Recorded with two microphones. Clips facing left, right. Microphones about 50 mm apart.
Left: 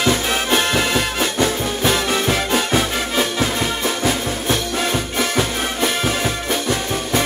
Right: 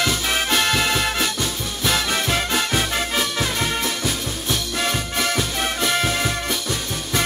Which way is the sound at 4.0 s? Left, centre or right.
Left.